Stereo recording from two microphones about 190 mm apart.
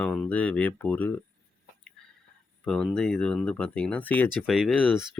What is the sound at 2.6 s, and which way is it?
Speech, 5° left (ahead or behind).